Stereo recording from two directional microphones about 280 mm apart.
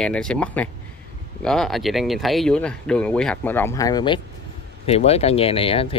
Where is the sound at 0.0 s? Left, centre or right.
Centre.